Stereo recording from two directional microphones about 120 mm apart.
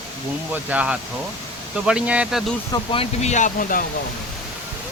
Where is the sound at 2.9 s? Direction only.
50° left (ahead or behind).